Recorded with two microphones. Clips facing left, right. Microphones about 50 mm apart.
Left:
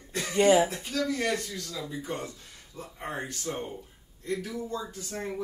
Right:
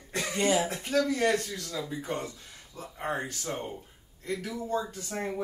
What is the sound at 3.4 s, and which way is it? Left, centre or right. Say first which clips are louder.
Speech: left 1 dB; right.